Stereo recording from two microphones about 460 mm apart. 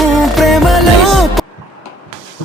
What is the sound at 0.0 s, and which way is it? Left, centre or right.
Music, centre.